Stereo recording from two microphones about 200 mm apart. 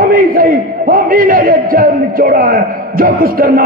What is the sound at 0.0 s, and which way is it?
A man's voice, 45° right (ahead or behind).